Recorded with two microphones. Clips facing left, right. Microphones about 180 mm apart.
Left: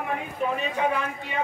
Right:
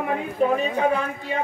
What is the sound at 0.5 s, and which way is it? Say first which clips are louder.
Speech: right 6 dB; 40° right (ahead or behind).